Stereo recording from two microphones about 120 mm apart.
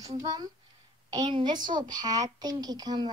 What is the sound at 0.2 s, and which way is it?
Speech, 30° right (ahead or behind).